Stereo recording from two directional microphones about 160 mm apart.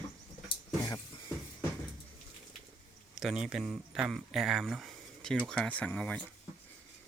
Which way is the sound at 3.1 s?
5° right (ahead or behind).